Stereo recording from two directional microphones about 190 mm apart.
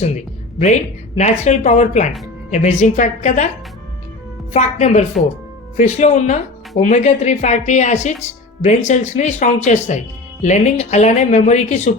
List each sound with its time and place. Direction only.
0.6 s speech: 40° left (ahead or behind)
4.5 s speech: 40° left (ahead or behind)